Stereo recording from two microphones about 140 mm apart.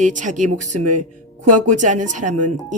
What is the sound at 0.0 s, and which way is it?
Speech, 65° right (ahead or behind).